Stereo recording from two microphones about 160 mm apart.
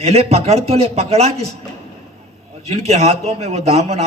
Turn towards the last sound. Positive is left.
turn(degrees=-40)  # may be behind; listen again after turning